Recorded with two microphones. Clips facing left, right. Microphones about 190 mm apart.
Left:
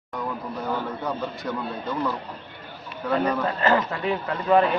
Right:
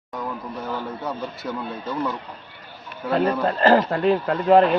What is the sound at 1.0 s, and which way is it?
A man's voice, centre (ahead or behind).